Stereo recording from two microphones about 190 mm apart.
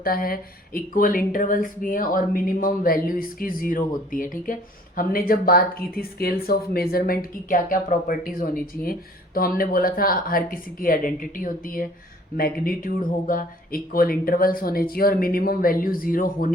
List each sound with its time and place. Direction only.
0.0 s speech: 50° left (ahead or behind)